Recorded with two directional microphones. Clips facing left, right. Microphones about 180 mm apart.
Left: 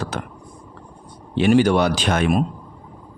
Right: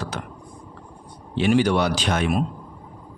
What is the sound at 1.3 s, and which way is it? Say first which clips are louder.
A man's voice: left 4 dB; 50° left (ahead or behind).